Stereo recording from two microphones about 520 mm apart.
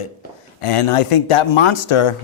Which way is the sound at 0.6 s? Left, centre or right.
Left.